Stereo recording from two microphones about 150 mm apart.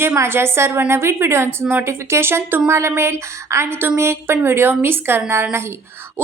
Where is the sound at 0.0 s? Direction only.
15° right (ahead or behind).